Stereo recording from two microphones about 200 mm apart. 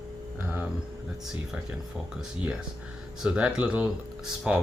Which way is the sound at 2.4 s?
5° right (ahead or behind).